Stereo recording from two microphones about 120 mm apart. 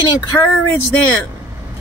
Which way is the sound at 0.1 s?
25° left (ahead or behind).